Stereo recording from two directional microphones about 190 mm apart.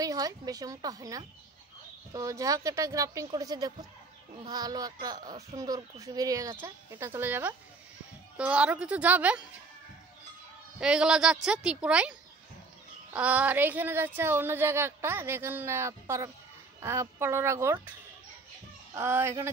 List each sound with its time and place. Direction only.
0.0 s a woman's voice: 20° right (ahead or behind)
10.8 s a woman's voice: 5° right (ahead or behind)
18.9 s speech: 10° right (ahead or behind)